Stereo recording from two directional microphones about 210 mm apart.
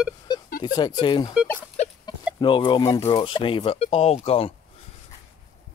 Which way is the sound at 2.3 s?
25° left (ahead or behind).